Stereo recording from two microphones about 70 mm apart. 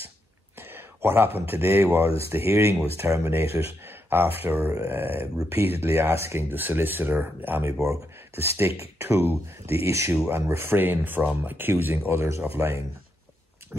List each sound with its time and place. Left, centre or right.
0.6 s speech: right
9.8 s speech: right